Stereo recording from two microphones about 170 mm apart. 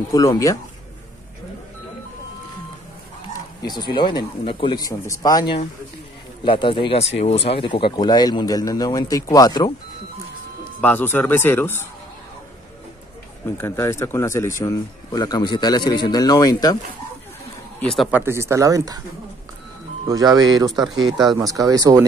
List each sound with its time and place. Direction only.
0.1 s speech: 20° left (ahead or behind)
3.6 s speech: 25° left (ahead or behind)
10.8 s speech: 10° left (ahead or behind)
13.6 s speech: 15° left (ahead or behind)
17.7 s speech: centre (ahead or behind)
18.1 s speech: 15° right (ahead or behind)
20.1 s speech: 20° right (ahead or behind)